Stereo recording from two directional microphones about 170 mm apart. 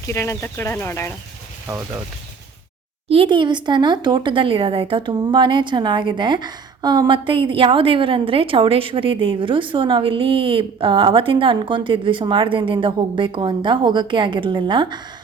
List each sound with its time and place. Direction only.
0.1 s speech: 15° left (ahead or behind)
3.1 s speech: 30° right (ahead or behind)